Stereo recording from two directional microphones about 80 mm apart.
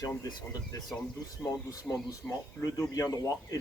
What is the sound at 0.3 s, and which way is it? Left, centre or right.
Speech, left.